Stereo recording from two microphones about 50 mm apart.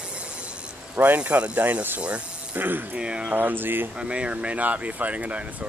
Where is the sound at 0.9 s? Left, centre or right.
Right.